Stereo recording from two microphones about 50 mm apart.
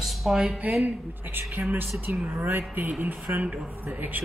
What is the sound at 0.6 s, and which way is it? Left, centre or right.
Speech, right.